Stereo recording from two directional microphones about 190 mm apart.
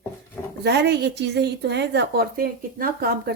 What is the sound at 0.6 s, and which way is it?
A woman's voice, 60° right (ahead or behind).